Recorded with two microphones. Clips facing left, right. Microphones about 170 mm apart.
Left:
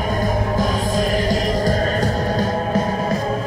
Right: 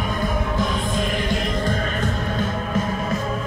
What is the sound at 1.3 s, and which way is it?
Music, 40° left (ahead or behind).